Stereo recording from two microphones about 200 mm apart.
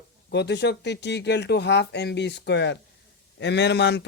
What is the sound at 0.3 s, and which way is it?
Speech, 55° left (ahead or behind).